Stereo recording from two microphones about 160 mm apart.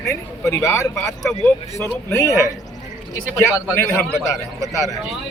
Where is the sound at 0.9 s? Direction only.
5° left (ahead or behind).